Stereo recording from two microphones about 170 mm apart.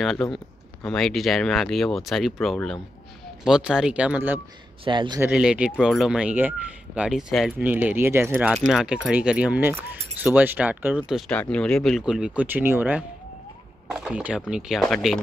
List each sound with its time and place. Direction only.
0.0 s speech: centre (ahead or behind)
4.8 s a man's voice: 25° right (ahead or behind)
5.2 s speech: 5° right (ahead or behind)